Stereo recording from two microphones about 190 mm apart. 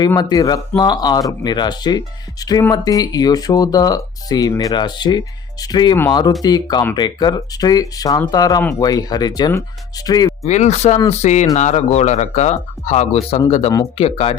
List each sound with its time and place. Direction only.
0.0 s speech: 20° left (ahead or behind)
10.4 s speech: 35° left (ahead or behind)